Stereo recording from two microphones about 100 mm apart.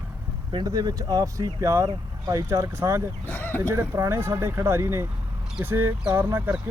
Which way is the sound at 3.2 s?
20° left (ahead or behind).